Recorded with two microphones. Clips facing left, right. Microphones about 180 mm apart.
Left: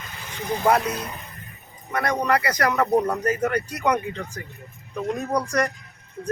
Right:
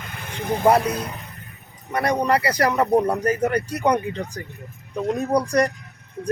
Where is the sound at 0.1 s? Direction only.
55° right (ahead or behind).